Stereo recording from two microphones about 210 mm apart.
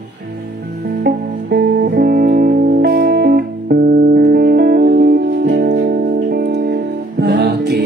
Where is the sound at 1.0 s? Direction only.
50° right (ahead or behind).